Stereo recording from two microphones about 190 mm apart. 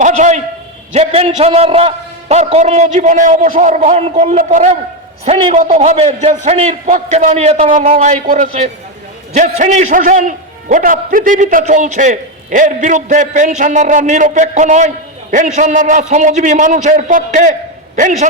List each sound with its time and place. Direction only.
0.0 s a sound: 40° right (ahead or behind)
0.9 s a man's voice: 35° right (ahead or behind)
5.2 s a man's voice: 30° right (ahead or behind)